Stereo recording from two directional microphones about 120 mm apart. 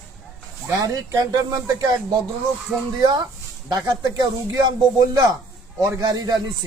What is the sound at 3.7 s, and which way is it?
Speech, 35° right (ahead or behind).